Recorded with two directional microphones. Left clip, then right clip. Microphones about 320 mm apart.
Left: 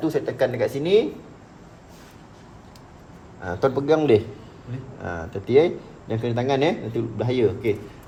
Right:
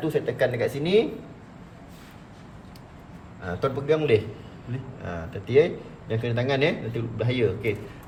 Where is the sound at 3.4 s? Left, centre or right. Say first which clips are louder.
Left 5 dB; left.